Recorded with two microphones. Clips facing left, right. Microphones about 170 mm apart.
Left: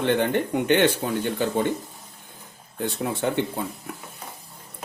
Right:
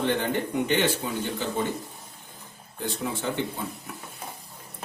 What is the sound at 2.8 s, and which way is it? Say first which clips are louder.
Speech: left 5 dB; 60° left (ahead or behind).